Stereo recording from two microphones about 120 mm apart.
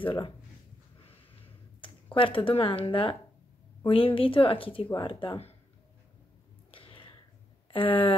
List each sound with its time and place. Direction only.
0.0 s a woman's voice: 45° left (ahead or behind)
1.8 s a woman's voice: 45° left (ahead or behind)
6.7 s a sound: 50° left (ahead or behind)
7.7 s a woman's voice: 45° left (ahead or behind)